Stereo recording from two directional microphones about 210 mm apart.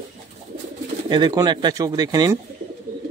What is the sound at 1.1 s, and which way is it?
Speech, 20° right (ahead or behind).